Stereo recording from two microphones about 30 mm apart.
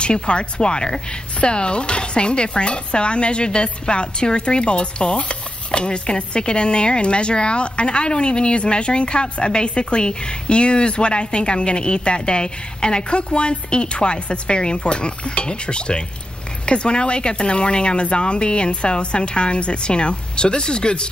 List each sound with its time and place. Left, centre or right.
0.0 s speech: left